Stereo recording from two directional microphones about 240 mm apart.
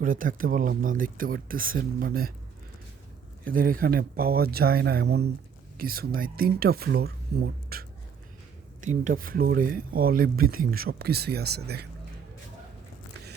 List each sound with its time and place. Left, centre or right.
0.0 s speech: right
3.4 s speech: right